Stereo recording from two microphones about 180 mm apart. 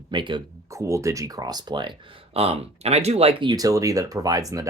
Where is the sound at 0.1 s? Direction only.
25° right (ahead or behind).